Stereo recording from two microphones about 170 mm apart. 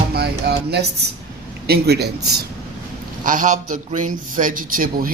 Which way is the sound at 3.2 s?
50° right (ahead or behind).